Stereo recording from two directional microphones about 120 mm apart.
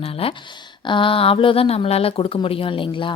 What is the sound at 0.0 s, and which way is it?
Speech, 50° left (ahead or behind).